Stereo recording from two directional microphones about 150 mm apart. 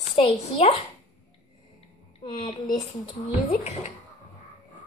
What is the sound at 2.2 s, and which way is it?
Speech, 30° left (ahead or behind).